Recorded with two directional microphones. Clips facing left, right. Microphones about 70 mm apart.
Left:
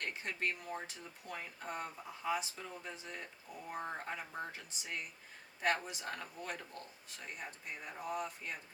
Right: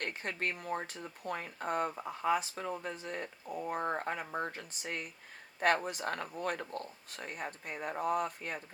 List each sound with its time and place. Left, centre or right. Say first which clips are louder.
0.0 s speech: right 3 dB; right